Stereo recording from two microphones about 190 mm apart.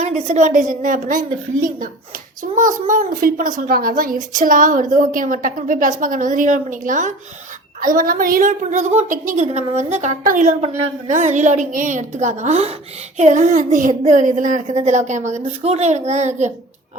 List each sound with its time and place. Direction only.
0.0 s a woman's voice: 35° right (ahead or behind)
2.8 s a woman's voice: 45° right (ahead or behind)